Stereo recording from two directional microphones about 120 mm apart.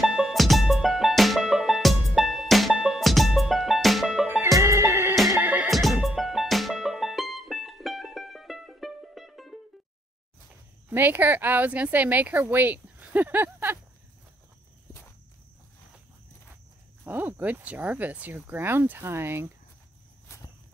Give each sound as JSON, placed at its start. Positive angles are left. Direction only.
{"t": 0.0, "sound": "music", "side_deg": 0}
{"t": 4.6, "sound": "music", "side_deg": -25}
{"t": 5.7, "sound": "music", "side_deg": 0}
{"t": 10.9, "sound": "speech", "side_deg": -15}
{"t": 17.0, "sound": "speech", "side_deg": -15}